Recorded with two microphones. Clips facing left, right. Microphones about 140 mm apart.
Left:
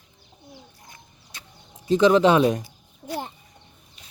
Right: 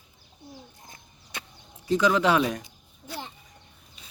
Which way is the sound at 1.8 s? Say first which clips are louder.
Left 6 dB; 25° left (ahead or behind).